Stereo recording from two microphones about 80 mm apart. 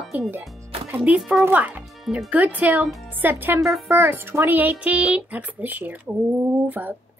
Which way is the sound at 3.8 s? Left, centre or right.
Right.